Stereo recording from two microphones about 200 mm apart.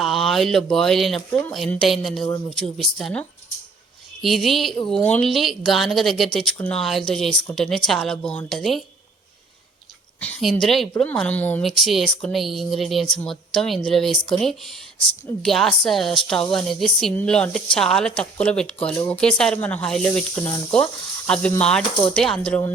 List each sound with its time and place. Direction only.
0.0 s a woman's voice: centre (ahead or behind)
10.2 s a woman's voice: 5° left (ahead or behind)